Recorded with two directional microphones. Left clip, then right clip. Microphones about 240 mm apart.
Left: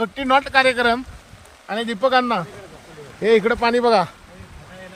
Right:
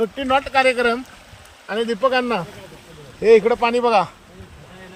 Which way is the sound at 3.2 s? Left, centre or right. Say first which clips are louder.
Right 3 dB; centre.